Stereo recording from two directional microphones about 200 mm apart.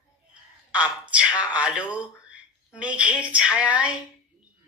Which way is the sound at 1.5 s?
5° right (ahead or behind).